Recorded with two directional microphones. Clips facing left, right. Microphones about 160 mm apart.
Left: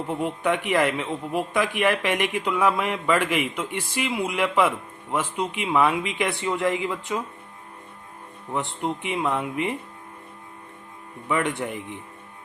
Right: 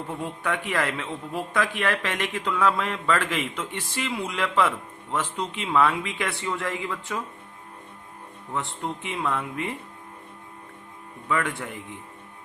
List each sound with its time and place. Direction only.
0.1 s a man's voice: 20° left (ahead or behind)
8.5 s a man's voice: 15° left (ahead or behind)
11.3 s speech: 20° left (ahead or behind)